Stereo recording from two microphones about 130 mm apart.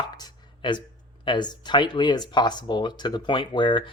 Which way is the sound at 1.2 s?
35° left (ahead or behind).